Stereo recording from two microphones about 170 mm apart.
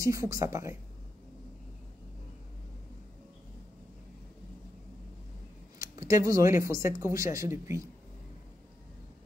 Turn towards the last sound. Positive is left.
turn(degrees=-15)  # may be behind; listen again after turning